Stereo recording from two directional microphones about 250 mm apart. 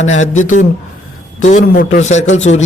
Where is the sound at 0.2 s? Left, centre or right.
Left.